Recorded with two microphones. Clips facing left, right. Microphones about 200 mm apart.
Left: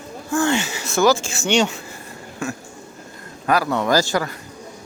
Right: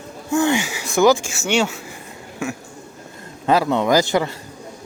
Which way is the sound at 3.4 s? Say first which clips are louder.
Right 2 dB; 25° right (ahead or behind).